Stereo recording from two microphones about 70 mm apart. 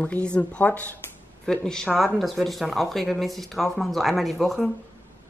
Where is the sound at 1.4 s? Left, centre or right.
Centre.